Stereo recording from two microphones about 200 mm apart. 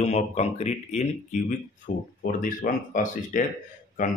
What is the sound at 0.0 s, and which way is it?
Speech, 35° left (ahead or behind).